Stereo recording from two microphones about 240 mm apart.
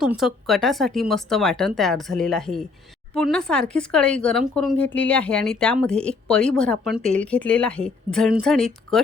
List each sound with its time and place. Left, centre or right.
0.0 s speech: centre